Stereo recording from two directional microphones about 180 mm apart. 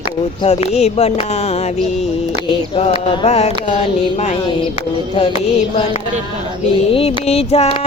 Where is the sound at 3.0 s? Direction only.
35° left (ahead or behind).